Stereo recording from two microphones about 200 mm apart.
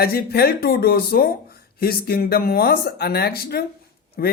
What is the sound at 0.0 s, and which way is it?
Speech, 50° left (ahead or behind).